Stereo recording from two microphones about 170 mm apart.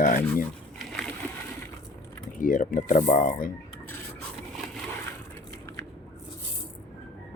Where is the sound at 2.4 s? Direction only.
50° left (ahead or behind).